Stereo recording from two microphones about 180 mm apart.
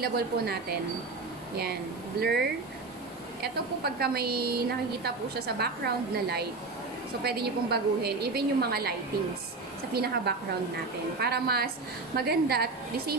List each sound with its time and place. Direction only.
0.0 s a woman's voice: 60° right (ahead or behind)
3.8 s a woman's voice: 60° right (ahead or behind)
9.9 s a woman's voice: 60° right (ahead or behind)